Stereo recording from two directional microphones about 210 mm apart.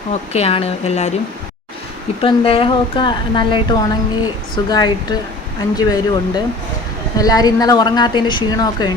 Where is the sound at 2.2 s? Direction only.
25° left (ahead or behind).